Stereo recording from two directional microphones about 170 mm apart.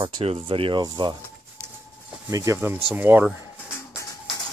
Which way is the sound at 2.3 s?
20° right (ahead or behind).